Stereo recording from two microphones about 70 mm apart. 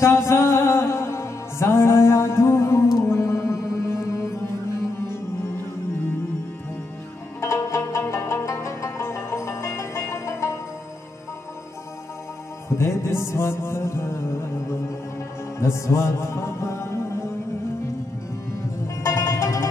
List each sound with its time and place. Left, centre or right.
0.0 s music: left
7.3 s banjo: left
8.0 s music: left
12.6 s music: left
15.6 s music: left
19.0 s music: left